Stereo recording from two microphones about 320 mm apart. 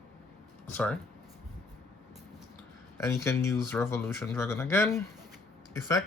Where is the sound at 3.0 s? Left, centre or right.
Centre.